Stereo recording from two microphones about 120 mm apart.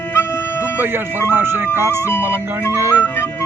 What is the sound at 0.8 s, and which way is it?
Speech, 20° right (ahead or behind).